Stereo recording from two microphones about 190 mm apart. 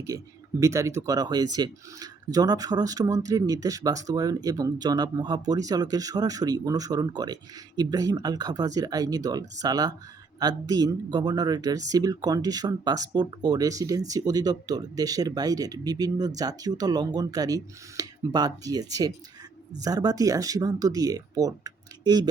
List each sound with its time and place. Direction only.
0.1 s speech: 20° right (ahead or behind)